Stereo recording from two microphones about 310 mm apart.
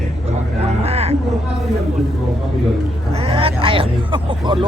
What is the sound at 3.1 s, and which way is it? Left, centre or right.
Speech, centre.